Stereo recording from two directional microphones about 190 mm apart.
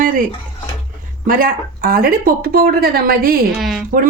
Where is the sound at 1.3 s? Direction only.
45° right (ahead or behind).